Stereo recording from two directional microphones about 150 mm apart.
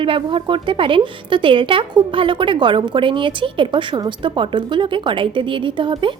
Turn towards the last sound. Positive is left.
turn(degrees=-35)  # may be behind; listen again after turning